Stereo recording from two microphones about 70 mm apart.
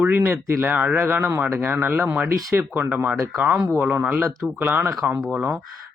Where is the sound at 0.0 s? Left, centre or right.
Right.